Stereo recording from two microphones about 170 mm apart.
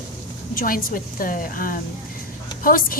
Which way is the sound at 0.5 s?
55° left (ahead or behind).